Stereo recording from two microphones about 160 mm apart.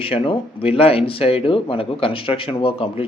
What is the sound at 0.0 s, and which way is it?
Speech, 35° left (ahead or behind).